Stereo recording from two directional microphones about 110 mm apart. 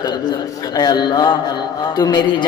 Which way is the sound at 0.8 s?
35° left (ahead or behind).